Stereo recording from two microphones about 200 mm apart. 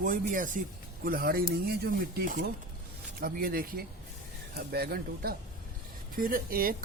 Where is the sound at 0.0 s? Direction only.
40° right (ahead or behind).